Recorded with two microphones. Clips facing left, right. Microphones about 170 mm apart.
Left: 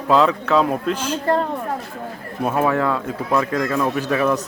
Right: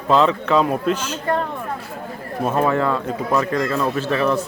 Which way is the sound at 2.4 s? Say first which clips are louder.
Even; 5° left (ahead or behind).